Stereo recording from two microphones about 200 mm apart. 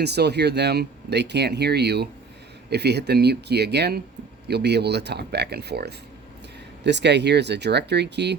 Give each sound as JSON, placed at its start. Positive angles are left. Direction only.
{"t": 0.0, "sound": "speech", "side_deg": -55}